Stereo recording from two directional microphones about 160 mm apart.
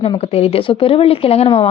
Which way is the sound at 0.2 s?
40° left (ahead or behind).